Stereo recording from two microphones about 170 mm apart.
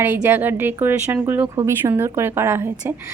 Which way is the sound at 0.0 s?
10° right (ahead or behind).